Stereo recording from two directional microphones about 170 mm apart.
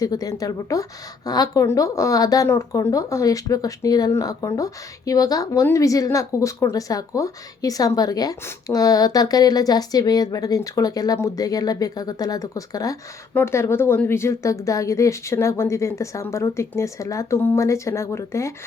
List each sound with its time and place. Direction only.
0.0 s a woman's voice: 20° left (ahead or behind)